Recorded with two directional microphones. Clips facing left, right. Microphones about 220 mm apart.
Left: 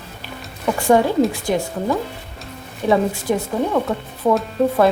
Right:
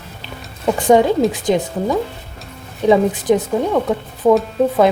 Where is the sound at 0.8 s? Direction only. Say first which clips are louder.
Right 2 dB; 20° right (ahead or behind).